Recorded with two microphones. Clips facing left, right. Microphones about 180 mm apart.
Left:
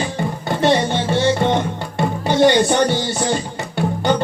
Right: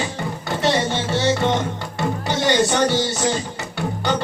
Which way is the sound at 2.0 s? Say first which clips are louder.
Left 7 dB; 55° left (ahead or behind).